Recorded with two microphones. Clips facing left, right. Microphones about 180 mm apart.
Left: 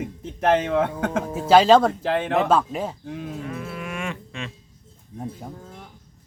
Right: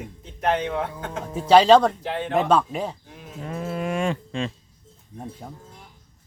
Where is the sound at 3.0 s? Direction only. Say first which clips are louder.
Left 11 dB; 75° left (ahead or behind).